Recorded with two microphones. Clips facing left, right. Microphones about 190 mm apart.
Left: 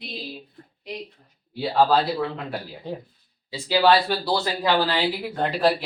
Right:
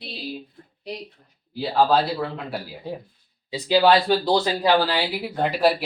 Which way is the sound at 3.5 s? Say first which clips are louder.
Right 2 dB; 20° right (ahead or behind).